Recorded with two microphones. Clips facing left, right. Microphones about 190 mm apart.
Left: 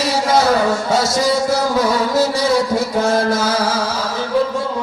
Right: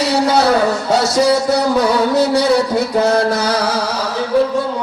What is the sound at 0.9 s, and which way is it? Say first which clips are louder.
Music: right 3 dB; 65° right (ahead or behind).